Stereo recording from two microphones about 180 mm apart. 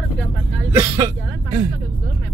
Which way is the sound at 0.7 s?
20° right (ahead or behind).